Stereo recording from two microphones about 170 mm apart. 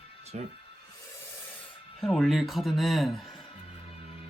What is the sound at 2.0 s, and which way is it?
Speech, centre (ahead or behind).